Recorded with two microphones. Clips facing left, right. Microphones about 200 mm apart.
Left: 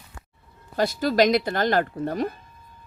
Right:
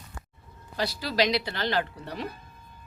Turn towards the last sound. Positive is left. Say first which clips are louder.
# left 9 dB
turn(degrees=45)  # may be behind; listen again after turning